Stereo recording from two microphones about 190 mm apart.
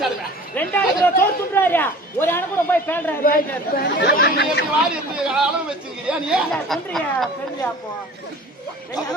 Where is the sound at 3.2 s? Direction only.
50° left (ahead or behind).